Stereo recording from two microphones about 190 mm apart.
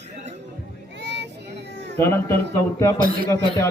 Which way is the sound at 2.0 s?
15° left (ahead or behind).